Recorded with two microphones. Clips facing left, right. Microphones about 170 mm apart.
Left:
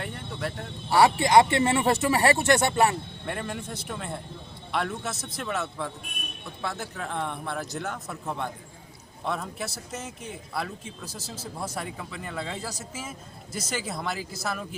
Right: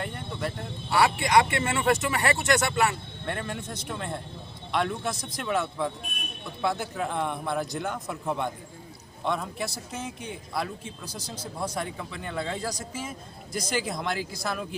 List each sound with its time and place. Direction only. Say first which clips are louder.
0.0 s a sound: right 1 dB; centre (ahead or behind)
0.9 s speech: left 3 dB; 30° left (ahead or behind)
3.2 s speech: right 1 dB; 5° left (ahead or behind)
11.6 s speech: right 3 dB; 5° left (ahead or behind)